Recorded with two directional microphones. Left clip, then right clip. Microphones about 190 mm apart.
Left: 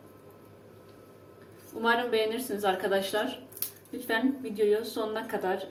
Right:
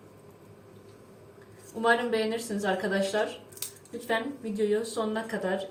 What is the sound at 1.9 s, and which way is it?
Speech, 30° left (ahead or behind).